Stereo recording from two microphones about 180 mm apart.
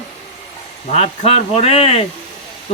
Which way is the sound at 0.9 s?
35° left (ahead or behind).